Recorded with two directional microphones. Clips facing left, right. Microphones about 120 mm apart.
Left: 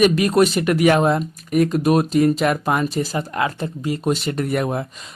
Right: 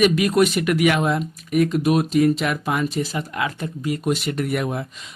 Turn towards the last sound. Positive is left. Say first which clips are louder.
# left 3 dB
turn(degrees=40)  # may be behind; listen again after turning